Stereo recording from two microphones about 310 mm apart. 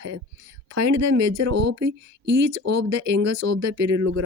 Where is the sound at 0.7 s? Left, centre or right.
Right.